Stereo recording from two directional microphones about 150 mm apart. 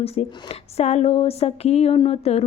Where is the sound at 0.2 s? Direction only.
45° left (ahead or behind).